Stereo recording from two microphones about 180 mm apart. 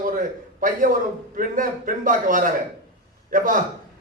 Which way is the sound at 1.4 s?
50° right (ahead or behind).